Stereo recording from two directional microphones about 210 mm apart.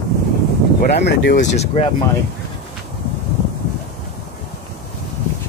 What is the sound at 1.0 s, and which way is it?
Speech, 55° left (ahead or behind).